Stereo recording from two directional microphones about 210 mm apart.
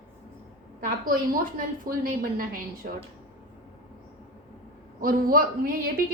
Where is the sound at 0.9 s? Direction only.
45° right (ahead or behind).